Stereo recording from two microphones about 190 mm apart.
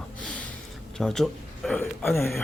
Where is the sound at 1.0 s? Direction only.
5° left (ahead or behind).